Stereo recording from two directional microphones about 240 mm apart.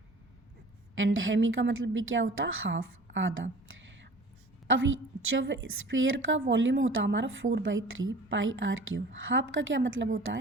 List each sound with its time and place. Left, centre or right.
0.9 s a woman's voice: right
5.4 s a woman's voice: right